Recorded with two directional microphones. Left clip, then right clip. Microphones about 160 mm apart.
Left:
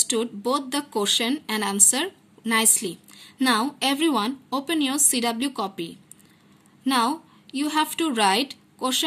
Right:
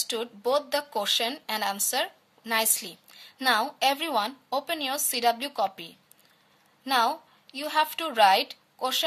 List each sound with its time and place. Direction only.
0.0 s a woman's voice: 40° right (ahead or behind)